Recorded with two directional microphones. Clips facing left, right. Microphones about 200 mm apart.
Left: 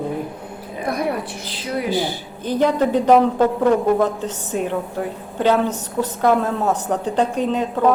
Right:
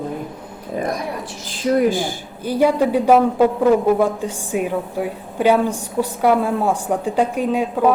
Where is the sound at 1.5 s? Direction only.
45° right (ahead or behind).